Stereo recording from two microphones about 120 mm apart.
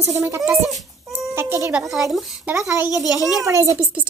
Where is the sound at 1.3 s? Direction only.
20° right (ahead or behind).